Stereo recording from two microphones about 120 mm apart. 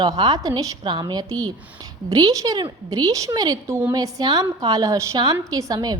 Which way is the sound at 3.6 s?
20° right (ahead or behind).